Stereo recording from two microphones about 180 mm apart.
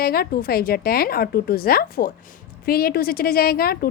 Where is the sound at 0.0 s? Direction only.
55° left (ahead or behind).